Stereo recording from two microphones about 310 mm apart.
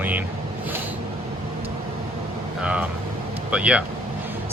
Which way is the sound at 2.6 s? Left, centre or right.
Centre.